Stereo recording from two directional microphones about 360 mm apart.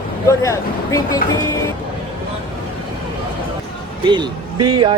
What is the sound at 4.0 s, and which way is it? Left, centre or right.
Speech, centre.